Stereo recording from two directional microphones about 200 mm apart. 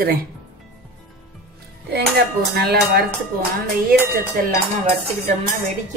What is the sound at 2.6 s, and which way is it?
Speech, 50° right (ahead or behind).